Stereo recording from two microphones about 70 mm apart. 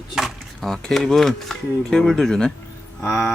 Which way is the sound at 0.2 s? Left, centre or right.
Centre.